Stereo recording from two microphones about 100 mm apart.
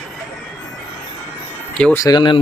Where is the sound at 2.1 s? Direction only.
50° left (ahead or behind).